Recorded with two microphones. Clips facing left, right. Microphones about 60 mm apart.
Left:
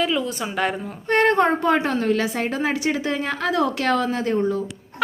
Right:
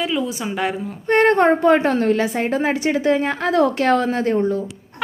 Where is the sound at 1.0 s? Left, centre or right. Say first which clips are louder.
Right 3 dB; right.